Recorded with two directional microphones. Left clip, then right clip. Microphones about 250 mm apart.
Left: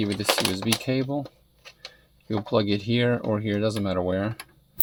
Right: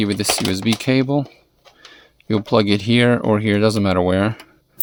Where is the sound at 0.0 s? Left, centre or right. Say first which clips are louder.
Right 4 dB; right.